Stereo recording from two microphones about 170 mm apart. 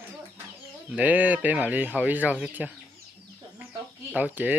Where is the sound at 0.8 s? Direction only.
10° right (ahead or behind).